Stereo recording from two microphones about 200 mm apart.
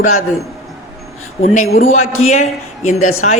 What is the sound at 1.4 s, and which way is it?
Speech, 40° left (ahead or behind).